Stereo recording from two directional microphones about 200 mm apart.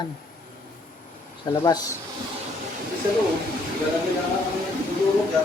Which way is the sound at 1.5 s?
25° left (ahead or behind).